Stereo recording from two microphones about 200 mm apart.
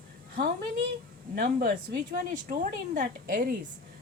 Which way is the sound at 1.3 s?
40° right (ahead or behind).